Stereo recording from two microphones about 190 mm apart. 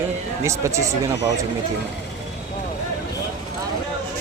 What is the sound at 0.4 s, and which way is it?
Speech, 15° right (ahead or behind).